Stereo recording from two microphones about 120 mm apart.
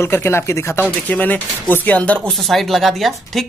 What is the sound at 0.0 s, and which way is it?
A man's voice, 20° left (ahead or behind).